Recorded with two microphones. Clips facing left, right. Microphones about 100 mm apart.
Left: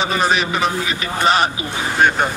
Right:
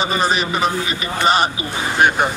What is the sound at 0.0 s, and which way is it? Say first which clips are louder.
Speech: left 1 dB; centre (ahead or behind).